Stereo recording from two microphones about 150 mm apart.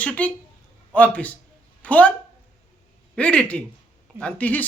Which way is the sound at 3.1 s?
5° left (ahead or behind).